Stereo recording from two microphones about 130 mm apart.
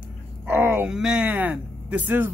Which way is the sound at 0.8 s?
5° right (ahead or behind).